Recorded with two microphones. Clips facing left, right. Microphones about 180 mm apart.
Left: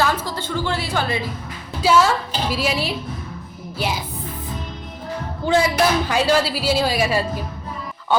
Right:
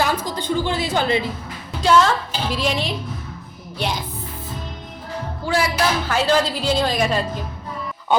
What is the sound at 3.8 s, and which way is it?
Music, 5° left (ahead or behind).